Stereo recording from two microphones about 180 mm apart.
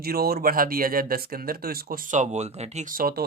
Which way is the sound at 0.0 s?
55° right (ahead or behind).